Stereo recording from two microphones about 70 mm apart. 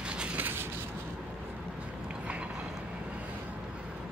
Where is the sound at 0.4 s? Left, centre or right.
Right.